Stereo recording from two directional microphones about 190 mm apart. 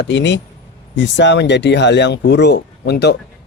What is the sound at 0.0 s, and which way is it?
A man's voice, 70° left (ahead or behind).